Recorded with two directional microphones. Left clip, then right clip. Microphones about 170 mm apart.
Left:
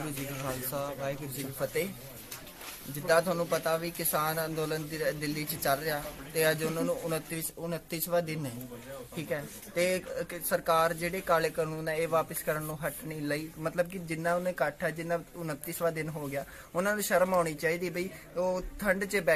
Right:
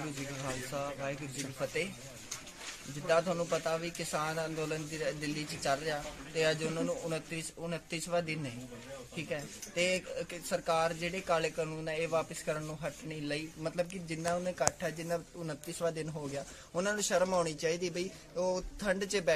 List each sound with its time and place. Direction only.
0.0 s a man's voice: centre (ahead or behind)
2.9 s a man's voice: centre (ahead or behind)
14.4 s speech: 20° right (ahead or behind)